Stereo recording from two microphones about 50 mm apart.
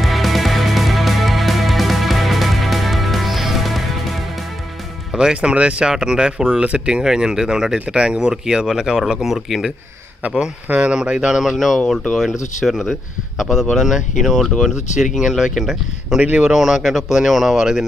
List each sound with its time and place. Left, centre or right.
0.0 s music: centre
5.1 s speech: centre
10.2 s speech: right
11.5 s speech: centre
16.2 s speech: right
16.4 s speech: centre